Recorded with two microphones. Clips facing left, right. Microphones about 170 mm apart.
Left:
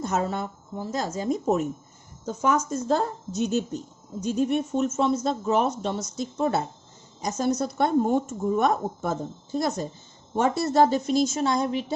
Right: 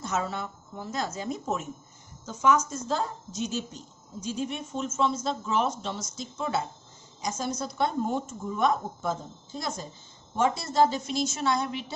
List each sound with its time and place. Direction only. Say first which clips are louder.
0.0 s speech: left 4 dB; 50° left (ahead or behind)
7.2 s speech: left 6 dB; 55° left (ahead or behind)